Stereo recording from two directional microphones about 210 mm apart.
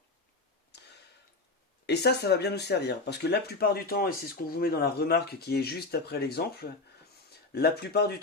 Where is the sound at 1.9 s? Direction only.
50° left (ahead or behind).